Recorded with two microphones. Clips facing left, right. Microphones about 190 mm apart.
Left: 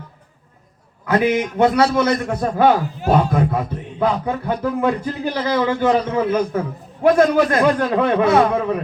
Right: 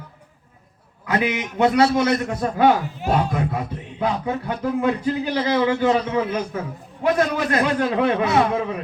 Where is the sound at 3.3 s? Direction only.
55° left (ahead or behind).